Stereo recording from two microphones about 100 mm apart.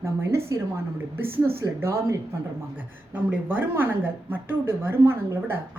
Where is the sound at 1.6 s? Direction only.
25° right (ahead or behind).